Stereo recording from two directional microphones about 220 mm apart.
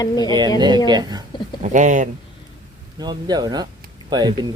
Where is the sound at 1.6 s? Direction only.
35° right (ahead or behind).